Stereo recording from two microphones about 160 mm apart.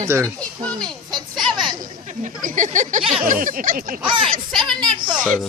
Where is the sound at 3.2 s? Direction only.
60° right (ahead or behind).